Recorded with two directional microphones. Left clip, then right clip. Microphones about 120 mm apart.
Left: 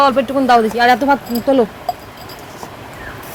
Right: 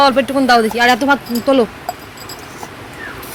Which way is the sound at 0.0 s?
15° right (ahead or behind).